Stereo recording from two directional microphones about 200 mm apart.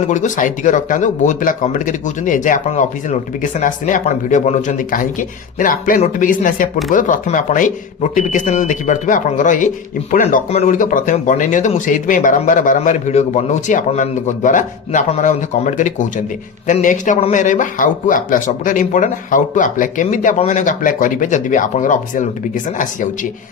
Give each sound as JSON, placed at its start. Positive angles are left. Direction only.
{"t": 0.1, "sound": "a man's voice", "side_deg": 40}